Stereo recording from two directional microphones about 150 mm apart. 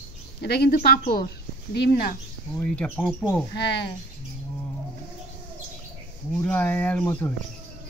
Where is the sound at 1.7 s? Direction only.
90° left.